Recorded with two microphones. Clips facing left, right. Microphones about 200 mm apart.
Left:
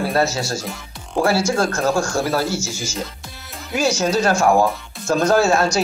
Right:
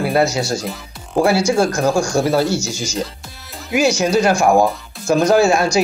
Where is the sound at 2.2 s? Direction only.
30° right (ahead or behind).